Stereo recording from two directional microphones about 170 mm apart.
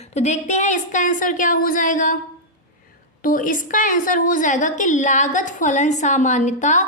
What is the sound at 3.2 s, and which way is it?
A woman's voice, 55° left (ahead or behind).